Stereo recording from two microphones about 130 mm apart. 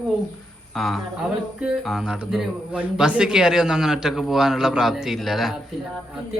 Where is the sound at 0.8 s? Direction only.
Centre (ahead or behind).